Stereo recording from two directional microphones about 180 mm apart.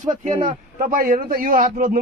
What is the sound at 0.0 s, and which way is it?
A man's voice, 45° right (ahead or behind).